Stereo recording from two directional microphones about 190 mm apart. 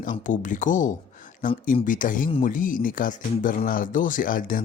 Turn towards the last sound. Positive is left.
turn(degrees=45)  # may be behind; listen again after turning